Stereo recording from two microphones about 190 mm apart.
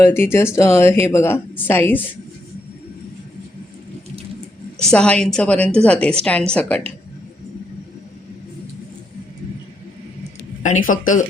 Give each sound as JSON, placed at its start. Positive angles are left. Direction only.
{"t": 0.0, "sound": "speech", "side_deg": 10}
{"t": 4.9, "sound": "a woman's voice", "side_deg": 5}
{"t": 10.6, "sound": "speech", "side_deg": 45}